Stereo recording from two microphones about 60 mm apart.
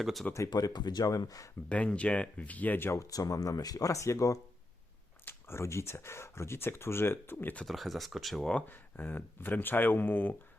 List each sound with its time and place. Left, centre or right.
0.0 s speech: centre
0.3 s speech: left
1.7 s speech: left
2.9 s speech: left
5.2 s speech: left
7.6 s speech: centre
8.6 s speech: left